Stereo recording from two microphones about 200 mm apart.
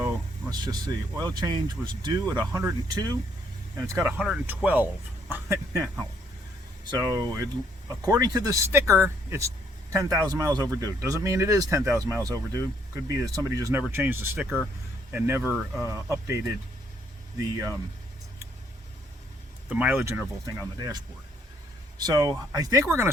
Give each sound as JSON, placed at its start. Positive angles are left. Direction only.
{"t": 0.0, "sound": "a sound", "side_deg": -15}
{"t": 1.2, "sound": "speech", "side_deg": -20}
{"t": 4.2, "sound": "speech", "side_deg": -5}
{"t": 6.9, "sound": "speech", "side_deg": -20}
{"t": 19.6, "sound": "speech", "side_deg": -5}